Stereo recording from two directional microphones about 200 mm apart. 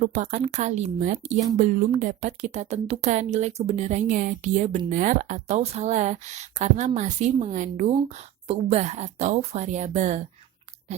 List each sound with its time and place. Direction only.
0.0 s speech: 35° right (ahead or behind)